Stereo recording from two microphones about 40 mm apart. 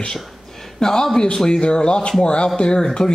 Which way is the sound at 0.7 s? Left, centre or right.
Centre.